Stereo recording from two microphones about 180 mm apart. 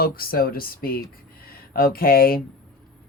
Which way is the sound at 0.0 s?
55° left (ahead or behind).